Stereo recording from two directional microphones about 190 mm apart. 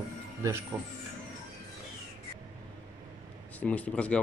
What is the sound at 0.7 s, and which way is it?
Speech, 15° right (ahead or behind).